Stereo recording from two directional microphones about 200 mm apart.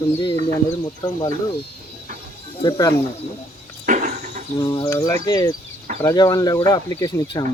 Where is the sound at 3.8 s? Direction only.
35° right (ahead or behind).